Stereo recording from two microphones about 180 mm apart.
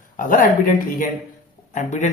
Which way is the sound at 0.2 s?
50° left (ahead or behind).